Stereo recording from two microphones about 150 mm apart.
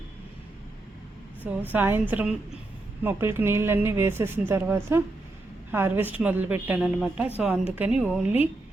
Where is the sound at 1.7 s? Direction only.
15° right (ahead or behind).